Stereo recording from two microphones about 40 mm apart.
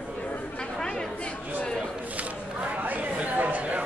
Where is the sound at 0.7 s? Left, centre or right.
Centre.